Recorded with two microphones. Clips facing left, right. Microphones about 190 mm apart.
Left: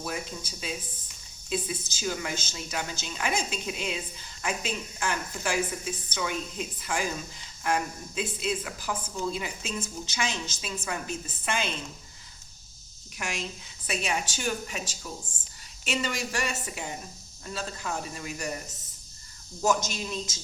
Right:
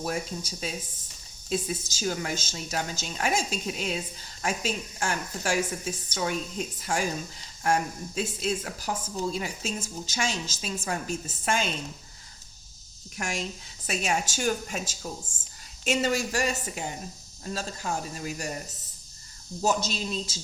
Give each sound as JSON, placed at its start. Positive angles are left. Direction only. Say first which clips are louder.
{"t": 0.0, "sound": "speech", "louder": "right 4 dB", "side_deg": -40}
{"t": 13.1, "sound": "speech", "louder": "right 2 dB", "side_deg": -40}
{"t": 15.9, "sound": "speech", "louder": "right 5 dB", "side_deg": -40}
{"t": 19.6, "sound": "speech", "louder": "even", "side_deg": -30}